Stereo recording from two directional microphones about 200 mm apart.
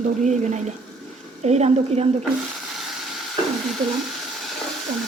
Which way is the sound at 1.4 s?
35° right (ahead or behind).